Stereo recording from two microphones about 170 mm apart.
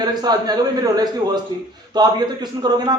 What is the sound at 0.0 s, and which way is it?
A man's voice, 25° right (ahead or behind).